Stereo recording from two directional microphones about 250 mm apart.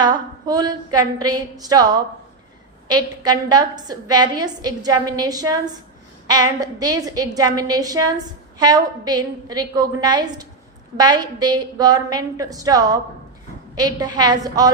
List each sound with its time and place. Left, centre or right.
0.0 s a woman's voice: centre